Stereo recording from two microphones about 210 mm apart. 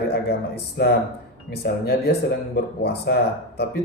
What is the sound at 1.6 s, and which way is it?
A man's voice, 50° left (ahead or behind).